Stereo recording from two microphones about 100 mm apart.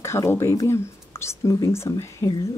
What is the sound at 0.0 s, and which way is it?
Speech, 25° left (ahead or behind).